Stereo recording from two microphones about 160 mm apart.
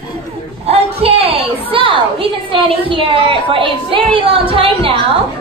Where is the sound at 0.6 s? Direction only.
40° right (ahead or behind).